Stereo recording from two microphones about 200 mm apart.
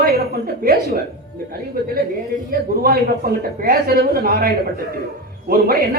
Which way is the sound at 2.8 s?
50° right (ahead or behind).